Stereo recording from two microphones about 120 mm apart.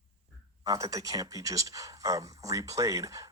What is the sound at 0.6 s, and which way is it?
Speech, 30° right (ahead or behind).